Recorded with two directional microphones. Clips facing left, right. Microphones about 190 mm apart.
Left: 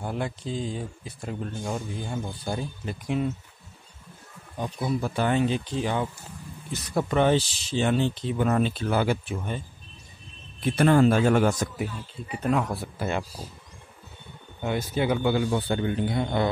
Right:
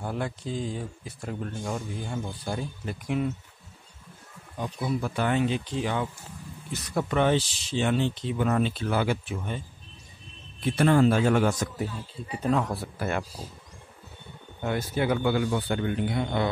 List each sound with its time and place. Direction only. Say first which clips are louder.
0.0 s speech: left 1 dB; 20° left (ahead or behind)
4.6 s speech: left 1 dB; 25° left (ahead or behind)
10.6 s a man's voice: left 2 dB; 50° left (ahead or behind)
12.4 s speech: even; 5° left (ahead or behind)
14.6 s speech: left 1 dB; 20° left (ahead or behind)